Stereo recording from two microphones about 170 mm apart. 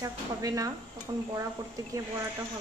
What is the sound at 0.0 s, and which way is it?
Speech, 20° right (ahead or behind).